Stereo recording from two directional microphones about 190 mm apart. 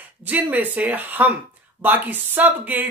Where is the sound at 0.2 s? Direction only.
10° right (ahead or behind).